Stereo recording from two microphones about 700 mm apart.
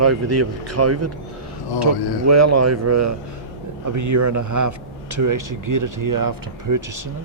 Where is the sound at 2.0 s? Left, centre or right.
Left.